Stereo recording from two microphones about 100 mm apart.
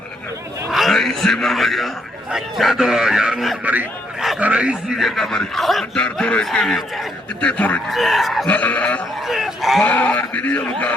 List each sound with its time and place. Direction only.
0.7 s a sound: centre (ahead or behind)
2.3 s speech: 5° right (ahead or behind)
3.6 s a man's voice: 15° right (ahead or behind); by 7.0 s centre (ahead or behind)
7.4 s speech: 15° left (ahead or behind)
7.9 s speech: centre (ahead or behind)
8.4 s speech: 15° left (ahead or behind)
9.2 s a sound: 5° right (ahead or behind)
9.8 s speech: 15° left (ahead or behind)